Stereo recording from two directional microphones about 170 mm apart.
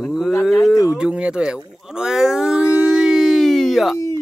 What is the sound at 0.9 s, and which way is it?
Speech, 5° right (ahead or behind).